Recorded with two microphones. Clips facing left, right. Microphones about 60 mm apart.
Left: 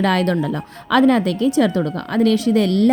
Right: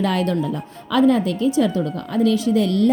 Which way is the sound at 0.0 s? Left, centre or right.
Left.